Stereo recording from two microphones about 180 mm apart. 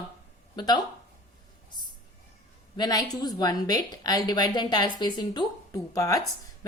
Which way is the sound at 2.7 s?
20° left (ahead or behind).